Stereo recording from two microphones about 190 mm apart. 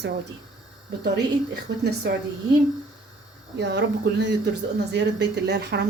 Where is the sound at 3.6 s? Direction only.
65° right (ahead or behind).